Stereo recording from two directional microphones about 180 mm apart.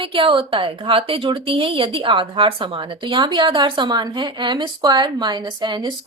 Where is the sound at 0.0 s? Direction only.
30° right (ahead or behind).